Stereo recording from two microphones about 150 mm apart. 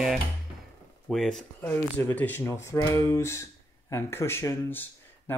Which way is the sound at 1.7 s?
15° left (ahead or behind).